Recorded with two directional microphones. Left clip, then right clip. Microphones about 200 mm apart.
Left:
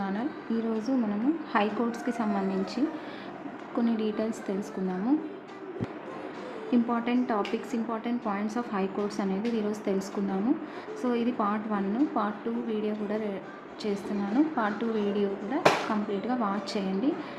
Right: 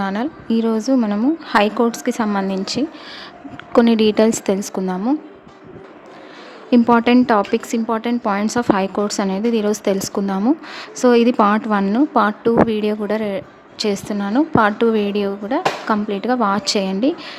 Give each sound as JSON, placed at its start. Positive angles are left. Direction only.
{"t": 0.0, "sound": "a woman's voice", "side_deg": -50}
{"t": 6.7, "sound": "a woman's voice", "side_deg": -55}